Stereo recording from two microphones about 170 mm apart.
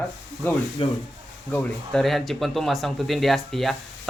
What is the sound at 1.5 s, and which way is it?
Speech, 5° left (ahead or behind).